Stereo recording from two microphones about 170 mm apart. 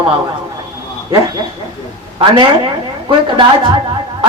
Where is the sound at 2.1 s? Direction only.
25° right (ahead or behind).